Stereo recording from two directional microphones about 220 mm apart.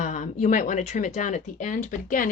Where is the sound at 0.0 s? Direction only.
35° left (ahead or behind).